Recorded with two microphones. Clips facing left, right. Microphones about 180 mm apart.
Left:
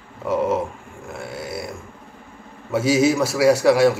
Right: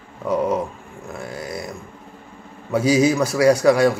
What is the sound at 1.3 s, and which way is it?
Grunt, 5° left (ahead or behind).